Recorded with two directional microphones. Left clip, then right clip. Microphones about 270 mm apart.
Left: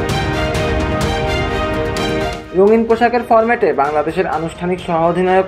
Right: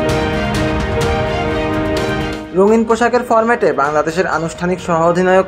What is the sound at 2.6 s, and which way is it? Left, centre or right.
Speech, right.